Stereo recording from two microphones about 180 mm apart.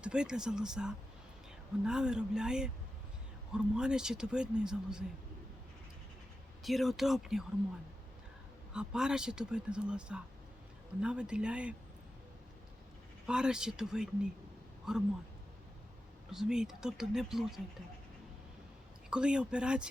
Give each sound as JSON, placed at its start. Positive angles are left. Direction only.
{"t": 0.0, "sound": "speech", "side_deg": -5}
{"t": 6.6, "sound": "speech", "side_deg": 0}
{"t": 8.7, "sound": "speech", "side_deg": -5}
{"t": 13.2, "sound": "speech", "side_deg": -5}
{"t": 16.3, "sound": "speech", "side_deg": -5}
{"t": 19.1, "sound": "speech", "side_deg": -5}